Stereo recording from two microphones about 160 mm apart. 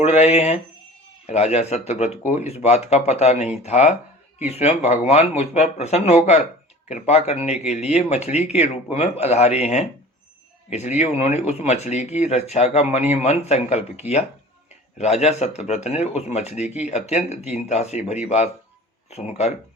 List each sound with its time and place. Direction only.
0.0 s speech: 40° left (ahead or behind)